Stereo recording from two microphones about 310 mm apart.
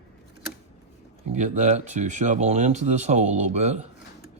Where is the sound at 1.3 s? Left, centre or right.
Right.